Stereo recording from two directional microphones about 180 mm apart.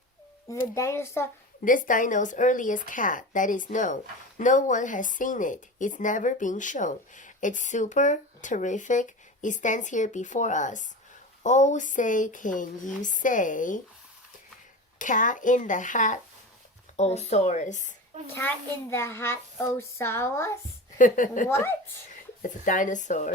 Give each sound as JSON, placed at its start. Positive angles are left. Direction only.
{"t": 0.7, "sound": "a child's voice", "side_deg": 15}
{"t": 1.6, "sound": "a woman's voice", "side_deg": 45}
{"t": 14.9, "sound": "a woman's voice", "side_deg": 45}
{"t": 18.3, "sound": "a child's voice", "side_deg": 15}
{"t": 21.0, "sound": "a woman's voice", "side_deg": 45}
{"t": 21.4, "sound": "a child's voice", "side_deg": 15}
{"t": 22.1, "sound": "speech", "side_deg": 45}